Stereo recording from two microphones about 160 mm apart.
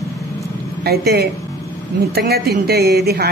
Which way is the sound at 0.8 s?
75° right (ahead or behind).